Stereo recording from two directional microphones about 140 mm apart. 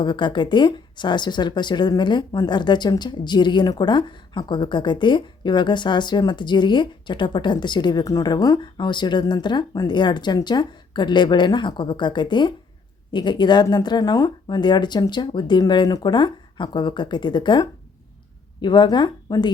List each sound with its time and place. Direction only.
0.0 s speech: 35° left (ahead or behind)